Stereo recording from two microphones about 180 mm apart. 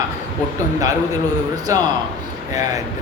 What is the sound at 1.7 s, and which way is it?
Speech, 20° right (ahead or behind).